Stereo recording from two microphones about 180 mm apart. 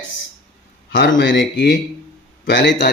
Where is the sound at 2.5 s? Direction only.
80° left.